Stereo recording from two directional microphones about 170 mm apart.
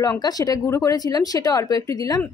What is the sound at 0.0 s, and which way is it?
A woman's voice, 20° left (ahead or behind).